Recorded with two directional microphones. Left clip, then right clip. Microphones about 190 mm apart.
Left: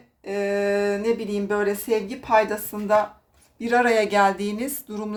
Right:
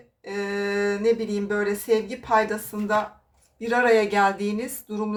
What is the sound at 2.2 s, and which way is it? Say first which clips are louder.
Speech: left 4 dB; 30° left (ahead or behind).